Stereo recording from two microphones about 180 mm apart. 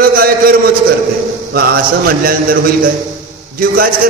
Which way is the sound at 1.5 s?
60° right (ahead or behind).